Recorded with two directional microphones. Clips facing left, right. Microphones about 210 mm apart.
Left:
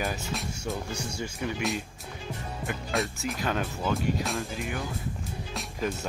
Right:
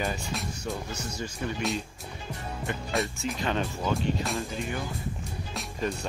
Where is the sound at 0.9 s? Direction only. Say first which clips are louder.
Left 1 dB; 10° left (ahead or behind).